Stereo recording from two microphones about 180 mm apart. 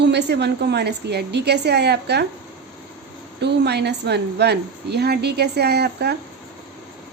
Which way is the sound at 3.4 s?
70° right (ahead or behind).